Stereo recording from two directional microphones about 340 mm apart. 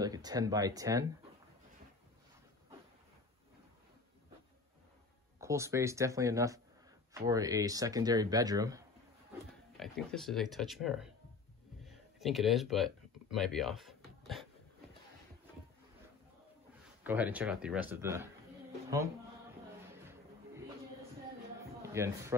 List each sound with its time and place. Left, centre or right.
0.0 s speech: centre
5.4 s speech: centre
9.8 s speech: centre
11.8 s a sound: centre
17.0 s speech: centre
21.8 s a sound: centre